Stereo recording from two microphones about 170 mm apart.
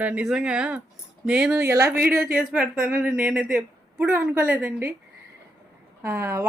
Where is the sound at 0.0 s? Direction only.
5° right (ahead or behind).